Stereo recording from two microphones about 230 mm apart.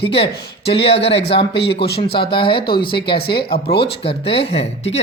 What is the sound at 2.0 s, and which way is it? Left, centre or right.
Speech, left.